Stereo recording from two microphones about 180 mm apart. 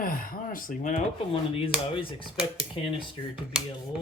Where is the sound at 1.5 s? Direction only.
30° left (ahead or behind).